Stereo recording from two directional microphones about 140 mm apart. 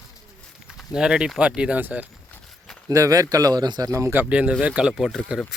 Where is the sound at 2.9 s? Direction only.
25° right (ahead or behind).